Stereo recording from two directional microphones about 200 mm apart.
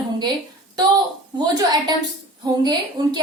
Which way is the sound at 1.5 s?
20° right (ahead or behind).